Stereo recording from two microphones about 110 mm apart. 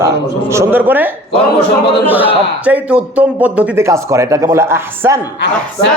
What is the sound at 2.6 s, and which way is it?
A man's voice, 10° right (ahead or behind).